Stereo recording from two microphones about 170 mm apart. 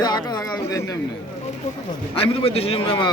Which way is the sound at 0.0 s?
25° left (ahead or behind).